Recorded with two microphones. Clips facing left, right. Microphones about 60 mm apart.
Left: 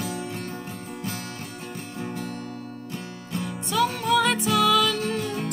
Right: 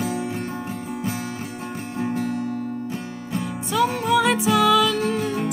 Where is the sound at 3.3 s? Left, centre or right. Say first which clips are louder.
Right 2 dB; centre.